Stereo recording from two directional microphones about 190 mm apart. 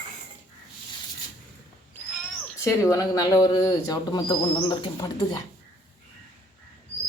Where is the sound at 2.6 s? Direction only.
15° left (ahead or behind).